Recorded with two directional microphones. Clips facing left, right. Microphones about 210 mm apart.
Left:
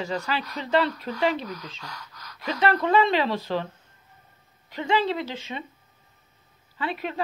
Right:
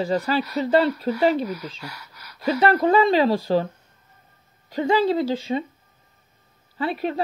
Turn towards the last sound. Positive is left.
turn(degrees=-35)  # may be behind; listen again after turning